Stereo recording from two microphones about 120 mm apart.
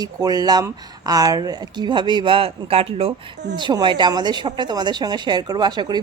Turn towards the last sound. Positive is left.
turn(degrees=-35)  # may be behind; listen again after turning